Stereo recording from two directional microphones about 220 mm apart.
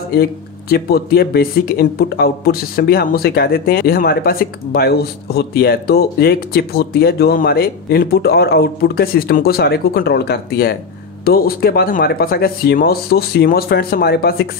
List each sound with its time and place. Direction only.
0.1 s speech: 45° left (ahead or behind)